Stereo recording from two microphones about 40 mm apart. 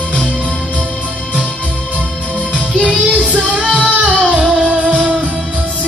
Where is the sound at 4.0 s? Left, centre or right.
Right.